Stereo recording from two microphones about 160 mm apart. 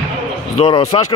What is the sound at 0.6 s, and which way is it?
Speech, 40° left (ahead or behind).